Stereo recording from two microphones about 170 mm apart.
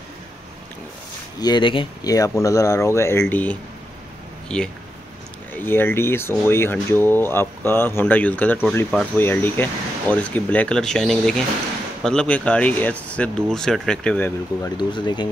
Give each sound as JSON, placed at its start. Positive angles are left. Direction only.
{"t": 1.4, "sound": "speech", "side_deg": 25}
{"t": 14.8, "sound": "speech", "side_deg": 25}